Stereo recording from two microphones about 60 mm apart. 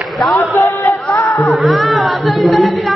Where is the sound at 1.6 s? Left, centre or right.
Centre.